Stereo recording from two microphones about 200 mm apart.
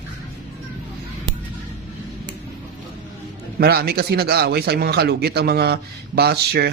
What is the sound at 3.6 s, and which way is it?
Speech, 50° right (ahead or behind).